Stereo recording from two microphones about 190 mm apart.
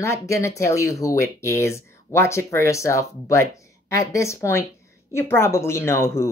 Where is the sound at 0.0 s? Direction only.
15° left (ahead or behind).